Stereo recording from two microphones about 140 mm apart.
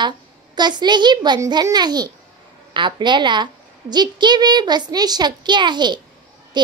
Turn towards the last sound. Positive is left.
turn(degrees=-30)  # may be behind; listen again after turning